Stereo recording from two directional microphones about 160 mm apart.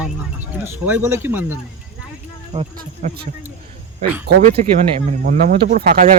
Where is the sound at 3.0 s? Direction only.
45° right (ahead or behind).